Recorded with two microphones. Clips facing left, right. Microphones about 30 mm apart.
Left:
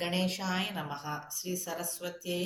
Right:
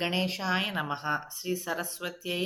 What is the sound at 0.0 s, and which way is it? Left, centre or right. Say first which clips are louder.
Speech: right 3 dB; centre.